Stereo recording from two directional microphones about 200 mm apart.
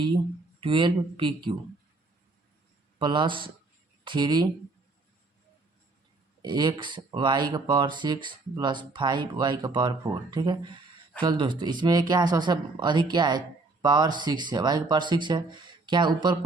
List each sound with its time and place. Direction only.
0.6 s speech: 25° right (ahead or behind)
3.0 s speech: 25° right (ahead or behind)
6.4 s speech: 20° right (ahead or behind)